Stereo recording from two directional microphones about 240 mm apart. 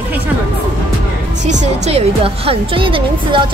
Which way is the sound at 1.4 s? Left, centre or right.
Right.